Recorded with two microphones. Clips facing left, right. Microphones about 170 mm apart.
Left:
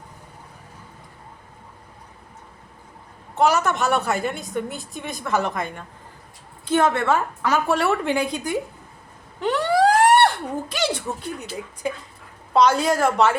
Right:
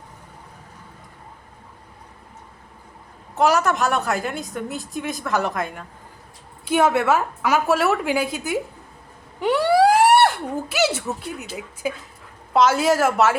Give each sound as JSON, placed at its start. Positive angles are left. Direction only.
{"t": 3.3, "sound": "a woman's voice", "side_deg": 0}